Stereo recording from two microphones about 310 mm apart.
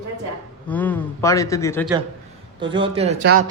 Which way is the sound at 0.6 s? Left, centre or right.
Centre.